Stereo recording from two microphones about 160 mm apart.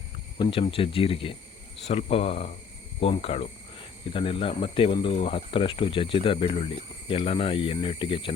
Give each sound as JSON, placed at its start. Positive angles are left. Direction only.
{"t": 0.3, "sound": "speech", "side_deg": 30}